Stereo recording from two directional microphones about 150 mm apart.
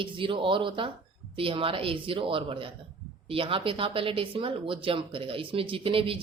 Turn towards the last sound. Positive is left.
turn(degrees=-35)  # may be behind; listen again after turning